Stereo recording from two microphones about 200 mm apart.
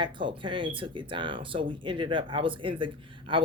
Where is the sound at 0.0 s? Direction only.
25° right (ahead or behind).